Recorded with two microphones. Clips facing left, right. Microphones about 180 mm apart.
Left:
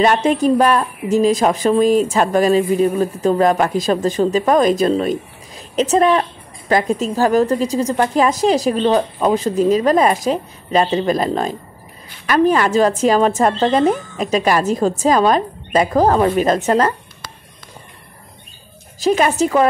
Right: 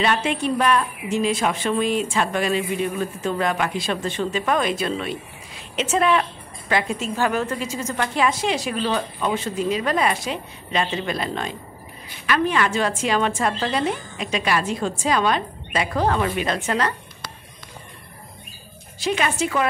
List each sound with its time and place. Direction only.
0.0 s a woman's voice: 45° left (ahead or behind)
18.9 s a woman's voice: 40° left (ahead or behind)